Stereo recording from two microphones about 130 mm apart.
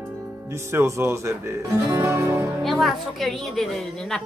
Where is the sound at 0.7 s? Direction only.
20° right (ahead or behind).